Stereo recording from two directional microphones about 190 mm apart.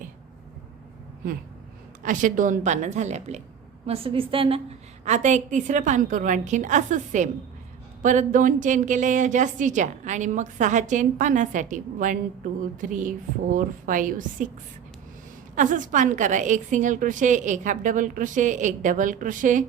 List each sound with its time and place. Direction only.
2.0 s a woman's voice: 45° right (ahead or behind); by 4.6 s 30° right (ahead or behind)
5.0 s a woman's voice: 40° right (ahead or behind)
15.5 s a woman's voice: 45° right (ahead or behind)